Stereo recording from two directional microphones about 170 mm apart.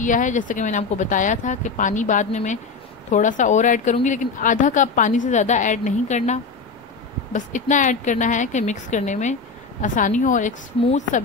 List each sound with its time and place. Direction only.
0.0 s a woman's voice: 50° left (ahead or behind)